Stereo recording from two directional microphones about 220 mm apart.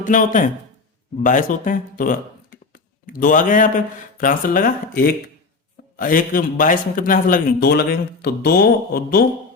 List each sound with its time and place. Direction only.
0.0 s a man's voice: 35° left (ahead or behind)